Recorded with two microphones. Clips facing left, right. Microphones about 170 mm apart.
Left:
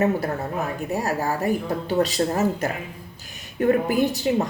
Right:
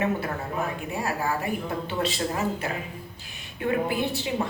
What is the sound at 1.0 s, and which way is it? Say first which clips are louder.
Speech: left 3 dB; 40° left (ahead or behind).